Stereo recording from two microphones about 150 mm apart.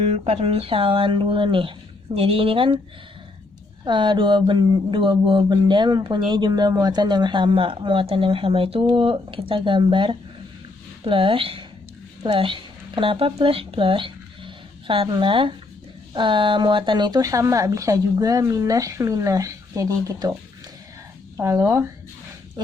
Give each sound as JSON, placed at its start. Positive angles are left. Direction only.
{"t": 0.0, "sound": "speech", "side_deg": -45}
{"t": 3.8, "sound": "speech", "side_deg": -30}
{"t": 21.3, "sound": "speech", "side_deg": -20}